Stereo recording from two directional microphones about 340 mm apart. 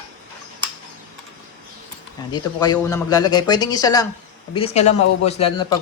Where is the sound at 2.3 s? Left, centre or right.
Centre.